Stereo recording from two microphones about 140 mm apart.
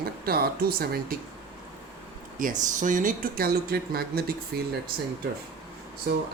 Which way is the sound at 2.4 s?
65° right (ahead or behind).